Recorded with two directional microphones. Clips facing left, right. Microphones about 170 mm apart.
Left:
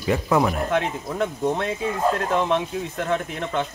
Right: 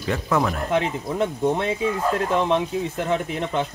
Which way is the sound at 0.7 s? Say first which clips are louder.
Right 1 dB; centre (ahead or behind).